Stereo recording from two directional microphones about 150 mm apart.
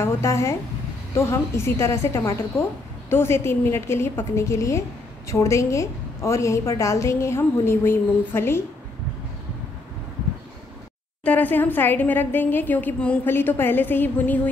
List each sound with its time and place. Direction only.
0.0 s a woman's voice: 20° left (ahead or behind)
11.2 s a woman's voice: 10° left (ahead or behind)